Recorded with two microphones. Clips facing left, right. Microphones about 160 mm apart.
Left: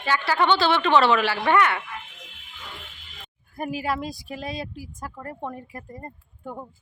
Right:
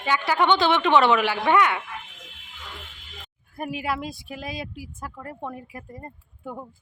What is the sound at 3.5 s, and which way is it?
Speech, centre (ahead or behind).